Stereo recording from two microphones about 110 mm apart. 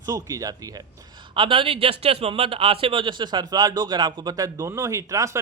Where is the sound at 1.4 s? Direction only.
50° right (ahead or behind); by 5.4 s 30° right (ahead or behind).